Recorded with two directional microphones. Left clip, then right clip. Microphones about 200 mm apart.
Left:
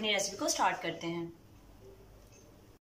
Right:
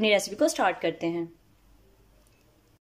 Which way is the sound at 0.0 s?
55° right (ahead or behind).